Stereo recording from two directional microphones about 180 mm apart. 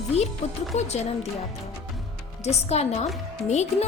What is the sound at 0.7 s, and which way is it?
Speech, 40° left (ahead or behind).